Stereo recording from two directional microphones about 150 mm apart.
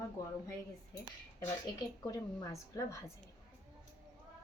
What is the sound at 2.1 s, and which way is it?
Speech, 25° left (ahead or behind).